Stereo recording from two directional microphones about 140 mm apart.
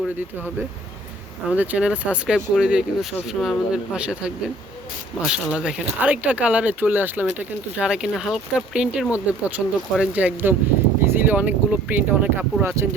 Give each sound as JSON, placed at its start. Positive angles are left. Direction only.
{"t": 1.5, "sound": "speech", "side_deg": -10}